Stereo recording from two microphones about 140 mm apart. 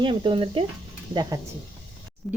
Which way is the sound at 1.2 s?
30° right (ahead or behind).